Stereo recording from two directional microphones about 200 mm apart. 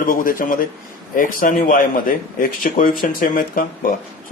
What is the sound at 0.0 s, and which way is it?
A man's voice, 45° left (ahead or behind).